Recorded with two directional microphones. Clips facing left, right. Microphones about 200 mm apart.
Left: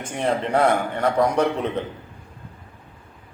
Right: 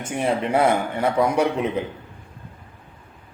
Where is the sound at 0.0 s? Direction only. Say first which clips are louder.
Right 1 dB; 5° right (ahead or behind).